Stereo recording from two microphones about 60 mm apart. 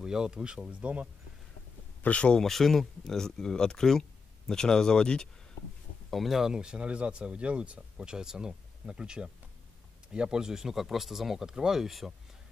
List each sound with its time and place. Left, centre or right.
0.0 s speech: centre
2.0 s speech: centre
2.4 s speech: centre
6.0 s speech: centre